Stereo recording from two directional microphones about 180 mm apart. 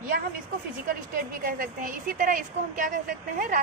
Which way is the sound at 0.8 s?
50° right (ahead or behind).